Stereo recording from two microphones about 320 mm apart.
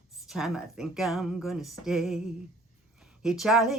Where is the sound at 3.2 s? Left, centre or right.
Centre.